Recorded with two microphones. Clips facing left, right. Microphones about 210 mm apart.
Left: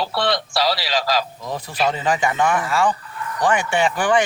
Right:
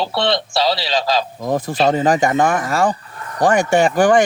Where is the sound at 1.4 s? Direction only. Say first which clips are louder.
Right 6 dB; 45° right (ahead or behind).